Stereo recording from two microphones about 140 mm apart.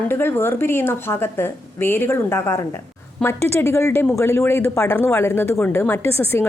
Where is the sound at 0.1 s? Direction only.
15° left (ahead or behind).